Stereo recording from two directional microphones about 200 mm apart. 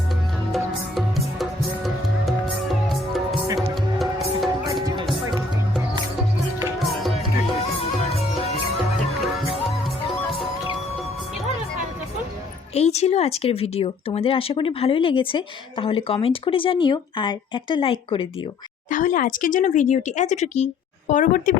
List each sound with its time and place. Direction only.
0.5 s music: centre (ahead or behind)
3.9 s music: centre (ahead or behind)
12.7 s speech: 35° left (ahead or behind)
18.9 s speech: 40° left (ahead or behind)